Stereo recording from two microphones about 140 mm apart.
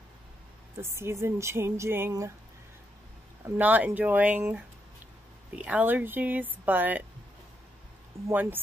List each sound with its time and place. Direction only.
0.7 s speech: 20° right (ahead or behind)
3.5 s speech: 10° right (ahead or behind)
8.3 s speech: 15° right (ahead or behind)